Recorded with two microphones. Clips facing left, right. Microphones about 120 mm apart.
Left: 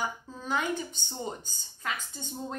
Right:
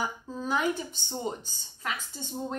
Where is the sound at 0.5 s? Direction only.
5° right (ahead or behind).